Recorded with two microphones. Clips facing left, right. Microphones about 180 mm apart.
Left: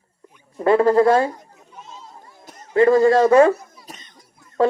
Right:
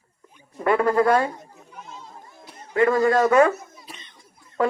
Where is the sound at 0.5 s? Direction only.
30° left (ahead or behind).